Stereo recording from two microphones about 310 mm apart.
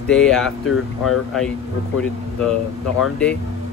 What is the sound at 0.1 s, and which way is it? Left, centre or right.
Speech, centre.